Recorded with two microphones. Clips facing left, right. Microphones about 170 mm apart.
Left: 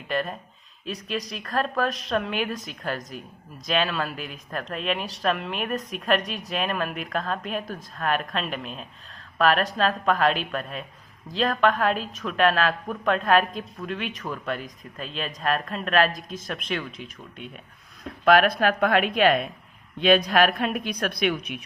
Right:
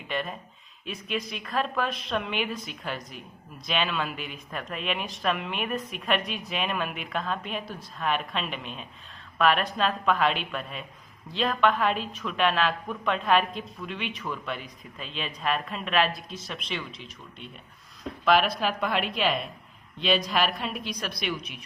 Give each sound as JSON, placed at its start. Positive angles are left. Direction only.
{"t": 0.1, "sound": "a woman's voice", "side_deg": 40}
{"t": 18.3, "sound": "a woman's voice", "side_deg": 55}